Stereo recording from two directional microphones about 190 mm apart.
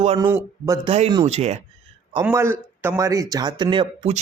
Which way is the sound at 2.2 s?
15° right (ahead or behind).